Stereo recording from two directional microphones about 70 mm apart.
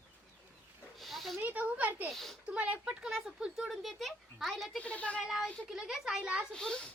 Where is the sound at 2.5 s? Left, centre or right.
Centre.